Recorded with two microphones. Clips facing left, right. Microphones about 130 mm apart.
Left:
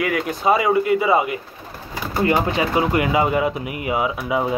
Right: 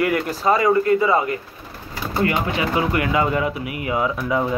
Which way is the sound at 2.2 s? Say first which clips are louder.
Left 2 dB; 25° left (ahead or behind).